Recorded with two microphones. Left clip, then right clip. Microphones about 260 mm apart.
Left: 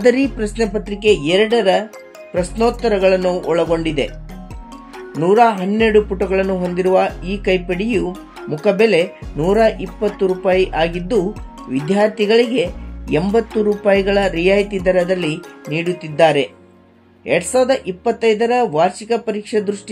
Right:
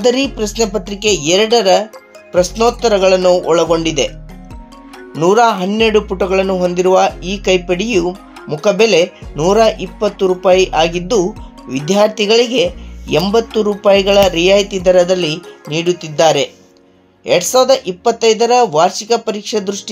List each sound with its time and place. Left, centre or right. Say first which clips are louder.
0.0 s speech: right 1 dB; centre
5.2 s speech: right 2 dB; centre